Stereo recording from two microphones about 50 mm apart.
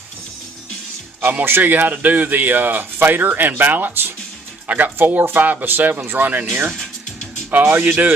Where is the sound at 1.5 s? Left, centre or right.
Right.